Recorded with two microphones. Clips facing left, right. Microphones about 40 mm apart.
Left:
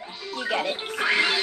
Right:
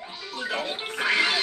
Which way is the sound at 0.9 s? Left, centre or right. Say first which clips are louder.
Even; centre.